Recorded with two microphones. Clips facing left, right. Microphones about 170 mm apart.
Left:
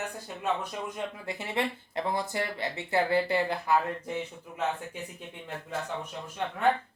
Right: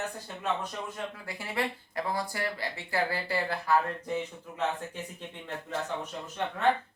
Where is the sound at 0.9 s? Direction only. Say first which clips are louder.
Left 3 dB; 20° left (ahead or behind).